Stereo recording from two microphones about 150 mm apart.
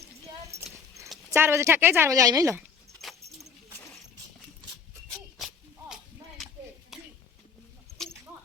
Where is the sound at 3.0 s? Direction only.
Centre (ahead or behind).